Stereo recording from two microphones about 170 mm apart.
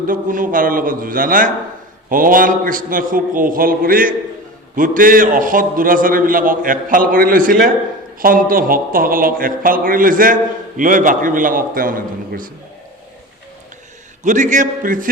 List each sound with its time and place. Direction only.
0.1 s a man's voice: 50° right (ahead or behind)
14.3 s a man's voice: 45° right (ahead or behind)